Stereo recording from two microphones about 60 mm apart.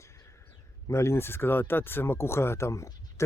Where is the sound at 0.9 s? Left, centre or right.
Left.